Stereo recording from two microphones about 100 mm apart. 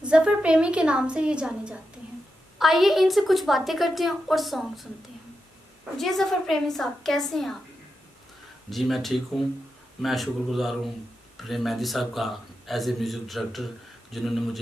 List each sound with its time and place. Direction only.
0.0 s a woman's voice: 10° right (ahead or behind)
5.9 s a man's voice: centre (ahead or behind)
8.6 s a man's voice: centre (ahead or behind)